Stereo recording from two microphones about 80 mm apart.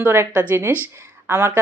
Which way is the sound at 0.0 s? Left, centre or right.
Right.